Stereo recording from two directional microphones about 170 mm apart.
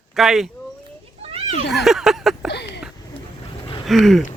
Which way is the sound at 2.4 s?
90° left.